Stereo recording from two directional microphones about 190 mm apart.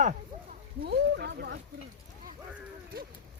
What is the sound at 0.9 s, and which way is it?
Speech, 60° right (ahead or behind).